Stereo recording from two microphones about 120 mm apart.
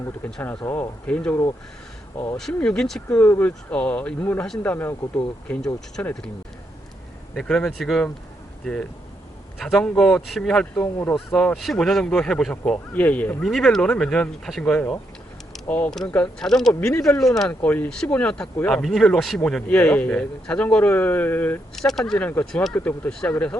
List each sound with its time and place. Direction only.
0.6 s a man's voice: 20° left (ahead or behind)
3.2 s a man's voice: 15° left (ahead or behind)
7.3 s a man's voice: 5° left (ahead or behind)
13.4 s a man's voice: centre (ahead or behind)
21.8 s a man's voice: centre (ahead or behind)